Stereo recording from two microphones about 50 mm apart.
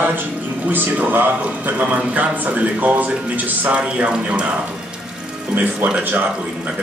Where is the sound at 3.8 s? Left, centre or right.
Right.